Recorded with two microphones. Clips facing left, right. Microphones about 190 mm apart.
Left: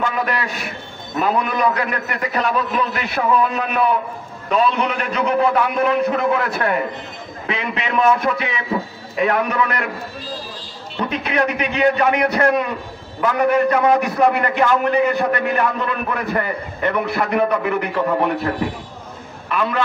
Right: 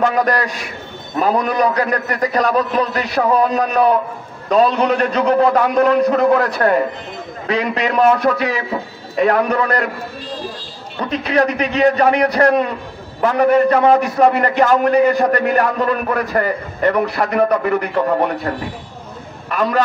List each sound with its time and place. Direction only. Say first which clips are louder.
0.0 s a man's voice: right 6 dB; 40° right (ahead or behind)
11.1 s a man's voice: right 4 dB; 35° right (ahead or behind)
19.5 s a man's voice: right 3 dB; 40° right (ahead or behind)